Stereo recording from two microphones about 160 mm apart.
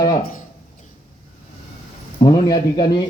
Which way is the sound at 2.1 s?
30° left (ahead or behind).